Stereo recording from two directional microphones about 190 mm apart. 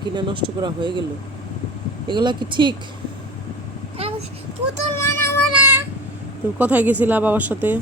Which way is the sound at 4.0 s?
30° right (ahead or behind).